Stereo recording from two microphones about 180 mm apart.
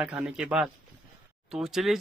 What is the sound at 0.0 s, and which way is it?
Speech, 5° right (ahead or behind).